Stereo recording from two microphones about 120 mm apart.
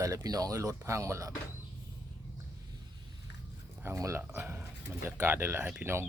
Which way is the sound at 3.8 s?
25° right (ahead or behind).